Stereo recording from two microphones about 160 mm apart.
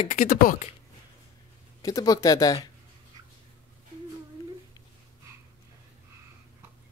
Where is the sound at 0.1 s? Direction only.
60° left (ahead or behind).